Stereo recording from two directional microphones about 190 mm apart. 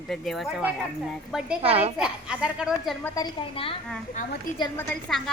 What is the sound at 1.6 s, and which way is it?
Speech, 30° right (ahead or behind).